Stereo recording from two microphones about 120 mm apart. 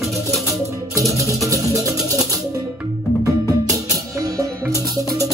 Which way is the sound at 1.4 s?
30° right (ahead or behind).